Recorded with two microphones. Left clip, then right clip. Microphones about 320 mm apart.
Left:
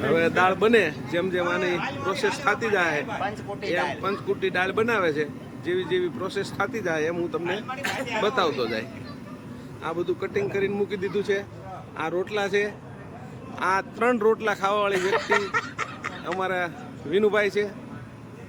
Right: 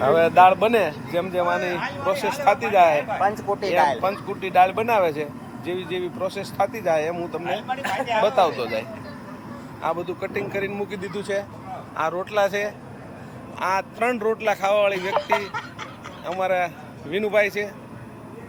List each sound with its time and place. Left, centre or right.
0.0 s speech: centre
9.8 s a man's voice: centre